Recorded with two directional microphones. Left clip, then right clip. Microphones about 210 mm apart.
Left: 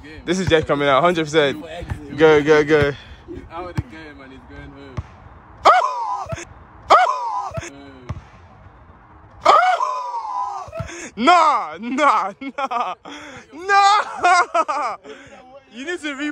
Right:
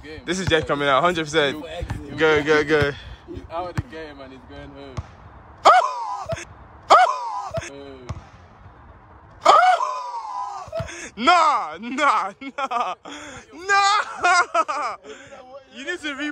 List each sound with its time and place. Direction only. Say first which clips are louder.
0.2 s speech: left 4 dB; 10° right (ahead or behind)
5.6 s dog: left 1 dB; 15° right (ahead or behind)
8.1 s basketball bounce: left 1 dB; 20° right (ahead or behind)
9.4 s speech: left 1 dB; 15° right (ahead or behind)